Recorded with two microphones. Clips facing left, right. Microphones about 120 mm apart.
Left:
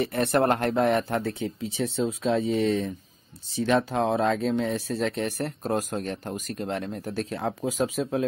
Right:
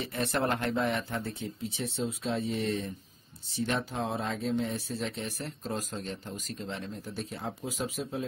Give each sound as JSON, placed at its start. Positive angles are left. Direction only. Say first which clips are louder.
{"t": 0.0, "sound": "speech", "louder": "left 8 dB", "side_deg": 60}
{"t": 1.2, "sound": "speech", "louder": "left 7 dB", "side_deg": 90}